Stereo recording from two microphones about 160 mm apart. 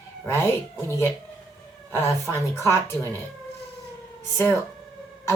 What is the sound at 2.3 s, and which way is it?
Speech, 15° left (ahead or behind).